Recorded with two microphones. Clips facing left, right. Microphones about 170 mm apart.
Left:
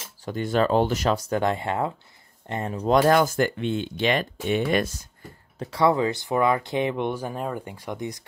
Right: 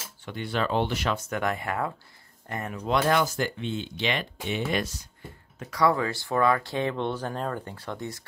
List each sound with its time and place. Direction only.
0.2 s speech: 45° left (ahead or behind)
3.0 s speech: 45° left (ahead or behind)
5.6 s speech: 25° left (ahead or behind)